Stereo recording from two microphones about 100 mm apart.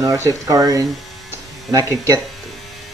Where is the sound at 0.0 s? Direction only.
35° right (ahead or behind).